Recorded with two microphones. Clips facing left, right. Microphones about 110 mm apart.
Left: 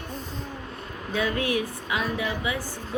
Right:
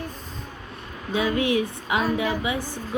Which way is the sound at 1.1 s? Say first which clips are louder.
Right 4 dB; 15° right (ahead or behind).